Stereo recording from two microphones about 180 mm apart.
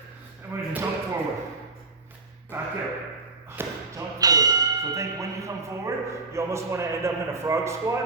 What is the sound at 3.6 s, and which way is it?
Speech, 15° right (ahead or behind).